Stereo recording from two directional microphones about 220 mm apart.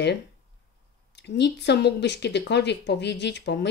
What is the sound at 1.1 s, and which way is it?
Speech, 50° left (ahead or behind).